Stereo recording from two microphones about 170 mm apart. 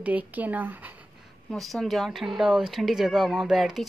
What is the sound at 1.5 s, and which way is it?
Speech, centre (ahead or behind).